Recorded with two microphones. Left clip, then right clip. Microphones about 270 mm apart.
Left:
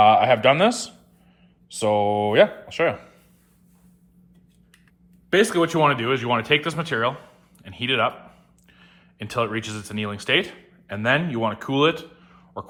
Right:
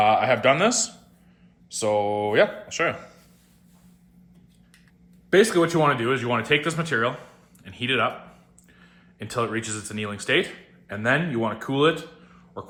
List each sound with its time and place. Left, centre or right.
0.0 s speech: left
5.5 s speech: left